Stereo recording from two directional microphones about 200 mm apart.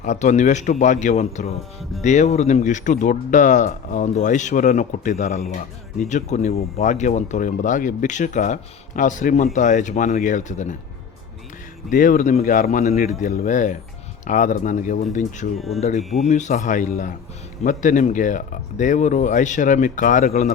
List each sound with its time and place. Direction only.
0.0 s speech: 35° left (ahead or behind)
11.9 s speech: 45° left (ahead or behind)
15.5 s speech: centre (ahead or behind)
15.8 s speech: 35° left (ahead or behind)